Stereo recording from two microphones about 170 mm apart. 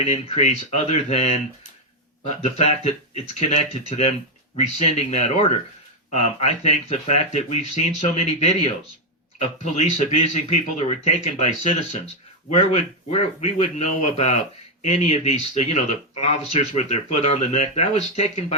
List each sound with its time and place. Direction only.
0.0 s speech: 40° left (ahead or behind)